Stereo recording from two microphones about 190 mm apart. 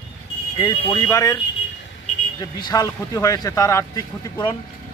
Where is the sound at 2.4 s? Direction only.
20° left (ahead or behind).